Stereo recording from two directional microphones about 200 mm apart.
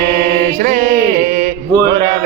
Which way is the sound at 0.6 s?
45° right (ahead or behind).